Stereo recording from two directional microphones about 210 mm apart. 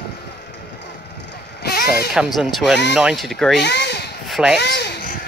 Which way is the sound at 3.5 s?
55° left (ahead or behind).